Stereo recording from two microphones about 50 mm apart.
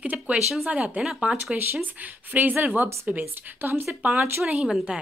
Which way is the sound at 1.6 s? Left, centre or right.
Right.